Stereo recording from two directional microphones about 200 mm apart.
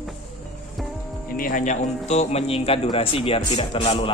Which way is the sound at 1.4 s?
40° left (ahead or behind).